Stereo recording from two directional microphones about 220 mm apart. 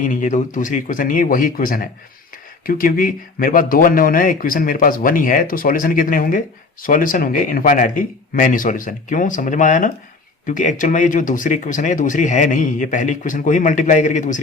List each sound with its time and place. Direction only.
0.0 s speech: 35° left (ahead or behind)